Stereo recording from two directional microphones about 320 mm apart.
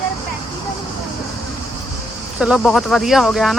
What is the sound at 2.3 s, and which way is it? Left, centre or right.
Speech, centre.